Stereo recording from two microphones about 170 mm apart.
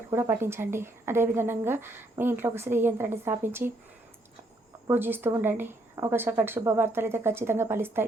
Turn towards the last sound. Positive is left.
turn(degrees=-15)  # may be behind; listen again after turning